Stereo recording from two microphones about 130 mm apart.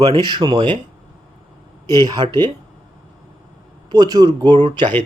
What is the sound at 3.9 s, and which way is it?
Speech, 30° right (ahead or behind).